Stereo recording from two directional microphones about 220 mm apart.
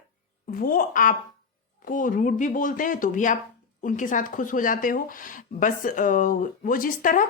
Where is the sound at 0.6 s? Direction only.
40° left (ahead or behind).